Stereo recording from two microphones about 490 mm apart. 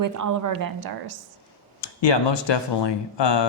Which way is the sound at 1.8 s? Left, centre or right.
Left.